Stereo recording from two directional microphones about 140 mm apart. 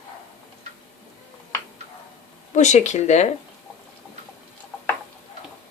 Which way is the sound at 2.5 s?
55° left (ahead or behind).